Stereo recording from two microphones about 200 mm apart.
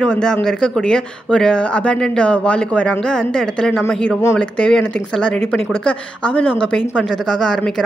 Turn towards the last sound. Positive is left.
turn(degrees=5)  # may be behind; listen again after turning